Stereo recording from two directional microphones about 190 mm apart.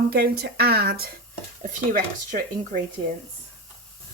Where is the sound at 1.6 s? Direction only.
45° right (ahead or behind).